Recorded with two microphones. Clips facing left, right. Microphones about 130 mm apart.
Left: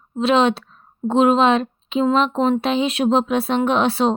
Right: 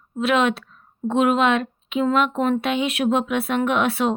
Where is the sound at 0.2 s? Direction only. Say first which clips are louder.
Left 3 dB; 30° left (ahead or behind).